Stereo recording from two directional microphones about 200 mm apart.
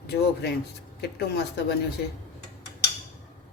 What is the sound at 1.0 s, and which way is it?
Speech, 55° left (ahead or behind).